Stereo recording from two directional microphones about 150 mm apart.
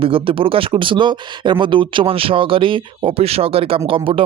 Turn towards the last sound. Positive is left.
turn(degrees=-35)  # may be behind; listen again after turning